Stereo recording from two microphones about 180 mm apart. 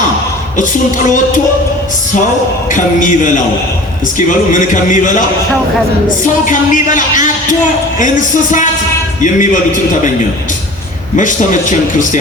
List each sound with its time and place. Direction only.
2.7 s a man's voice: 45° left (ahead or behind)
6.2 s a man's voice: 45° left (ahead or behind)
9.2 s a man's voice: 45° left (ahead or behind)
11.2 s a man's voice: 45° left (ahead or behind)